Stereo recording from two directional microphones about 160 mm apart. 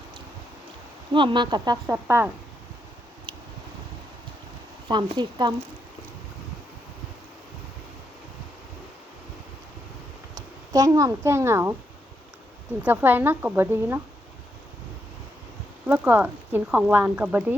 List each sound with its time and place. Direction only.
1.1 s a woman's voice: 30° right (ahead or behind)
4.9 s a woman's voice: 30° right (ahead or behind)
10.3 s speech: 20° right (ahead or behind)
12.8 s speech: 10° right (ahead or behind)
15.9 s speech: 10° right (ahead or behind)